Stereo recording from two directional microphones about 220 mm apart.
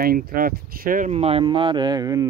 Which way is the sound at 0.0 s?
40° right (ahead or behind).